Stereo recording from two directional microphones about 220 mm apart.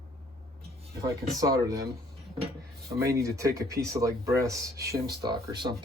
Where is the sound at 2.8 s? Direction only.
15° right (ahead or behind).